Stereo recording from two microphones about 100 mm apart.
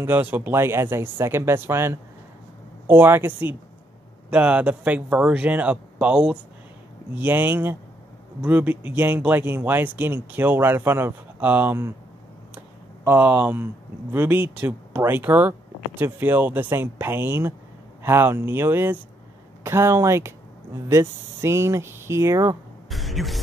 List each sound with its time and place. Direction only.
0.0 s speech: 20° right (ahead or behind)
12.5 s a sound: 20° right (ahead or behind)
14.1 s speech: 20° right (ahead or behind)
22.8 s speech: centre (ahead or behind)